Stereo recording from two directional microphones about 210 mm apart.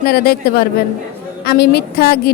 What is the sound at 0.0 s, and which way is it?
Speech, 50° left (ahead or behind).